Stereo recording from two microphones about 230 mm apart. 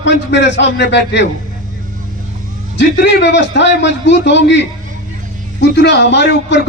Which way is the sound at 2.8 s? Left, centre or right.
Left.